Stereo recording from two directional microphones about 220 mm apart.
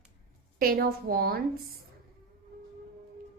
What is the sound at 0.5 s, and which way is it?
Speech, 45° right (ahead or behind).